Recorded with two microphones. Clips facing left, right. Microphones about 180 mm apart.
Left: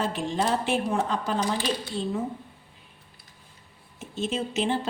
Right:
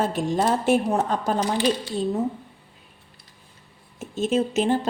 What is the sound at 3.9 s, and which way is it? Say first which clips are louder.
Speech: right 7 dB; 45° right (ahead or behind).